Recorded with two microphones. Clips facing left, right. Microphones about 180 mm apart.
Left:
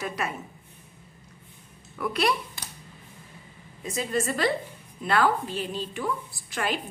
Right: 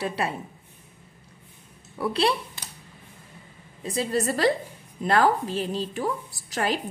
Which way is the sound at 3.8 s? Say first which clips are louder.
Right 2 dB; 35° right (ahead or behind).